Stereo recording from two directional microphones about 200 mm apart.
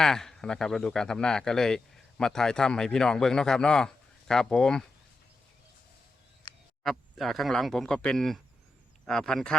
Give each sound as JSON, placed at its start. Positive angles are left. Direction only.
{"t": 0.0, "sound": "speech", "side_deg": 5}
{"t": 6.8, "sound": "speech", "side_deg": 0}